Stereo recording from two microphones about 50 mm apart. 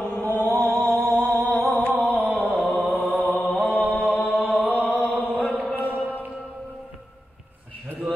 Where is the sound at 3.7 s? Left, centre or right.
Left.